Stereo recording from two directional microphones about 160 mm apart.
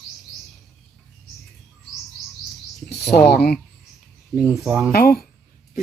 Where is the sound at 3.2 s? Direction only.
90° left.